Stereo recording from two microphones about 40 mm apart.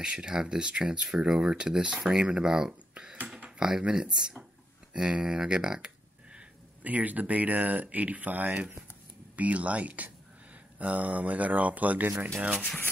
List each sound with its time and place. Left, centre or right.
0.0 s speech: right
1.0 s speech: centre
2.9 s a sound: right
3.5 s speech: centre
6.8 s speech: right